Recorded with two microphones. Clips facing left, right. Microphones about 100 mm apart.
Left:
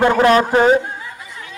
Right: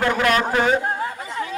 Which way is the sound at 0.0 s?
25° left (ahead or behind).